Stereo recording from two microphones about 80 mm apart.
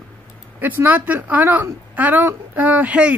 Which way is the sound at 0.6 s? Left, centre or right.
Right.